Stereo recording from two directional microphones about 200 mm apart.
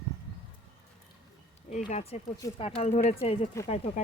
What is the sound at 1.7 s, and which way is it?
Speech, 35° left (ahead or behind).